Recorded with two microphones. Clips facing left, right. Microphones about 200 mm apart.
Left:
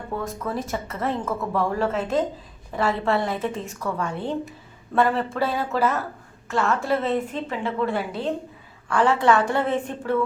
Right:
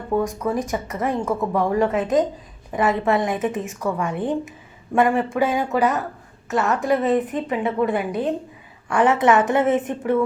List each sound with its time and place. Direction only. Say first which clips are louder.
0.2 s a woman's voice: right 5 dB; 15° right (ahead or behind)